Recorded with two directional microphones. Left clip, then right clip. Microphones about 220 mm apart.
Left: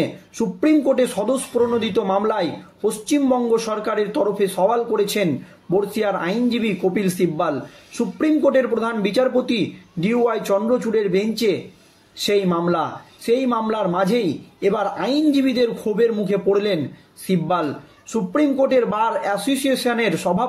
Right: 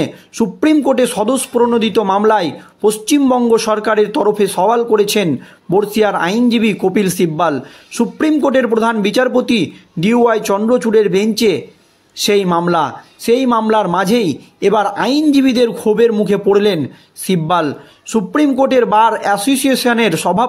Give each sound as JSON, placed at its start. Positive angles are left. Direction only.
{"t": 0.0, "sound": "speech", "side_deg": -45}